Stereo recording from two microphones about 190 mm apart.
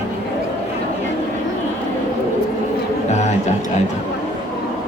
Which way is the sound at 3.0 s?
35° left (ahead or behind).